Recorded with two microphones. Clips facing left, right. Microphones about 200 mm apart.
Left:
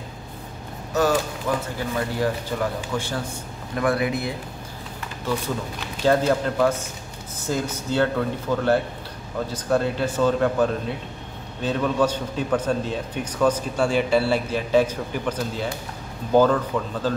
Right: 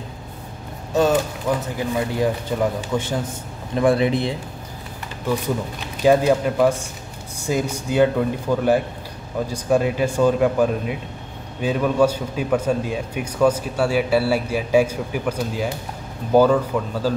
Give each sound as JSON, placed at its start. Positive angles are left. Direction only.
{"t": 1.5, "sound": "speech", "side_deg": -20}
{"t": 6.0, "sound": "a man's voice", "side_deg": -10}